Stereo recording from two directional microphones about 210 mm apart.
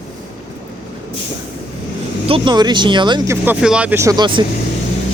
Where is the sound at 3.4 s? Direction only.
5° right (ahead or behind); by 4.5 s 20° right (ahead or behind).